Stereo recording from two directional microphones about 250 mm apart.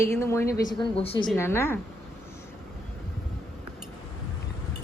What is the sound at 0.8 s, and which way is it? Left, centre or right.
Speech, left.